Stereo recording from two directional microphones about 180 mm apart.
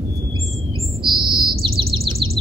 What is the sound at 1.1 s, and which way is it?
Bird, 25° right (ahead or behind).